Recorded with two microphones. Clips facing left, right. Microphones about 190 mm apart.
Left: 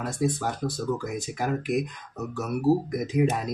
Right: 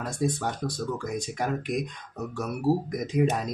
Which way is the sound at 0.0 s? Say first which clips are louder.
Left 1 dB; 5° left (ahead or behind).